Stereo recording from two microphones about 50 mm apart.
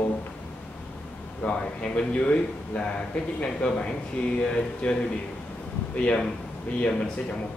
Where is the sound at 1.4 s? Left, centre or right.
Centre.